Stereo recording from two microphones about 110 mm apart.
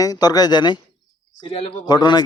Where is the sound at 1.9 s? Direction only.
40° left (ahead or behind).